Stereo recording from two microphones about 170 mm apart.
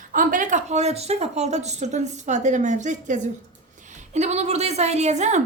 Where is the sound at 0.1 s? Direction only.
50° right (ahead or behind).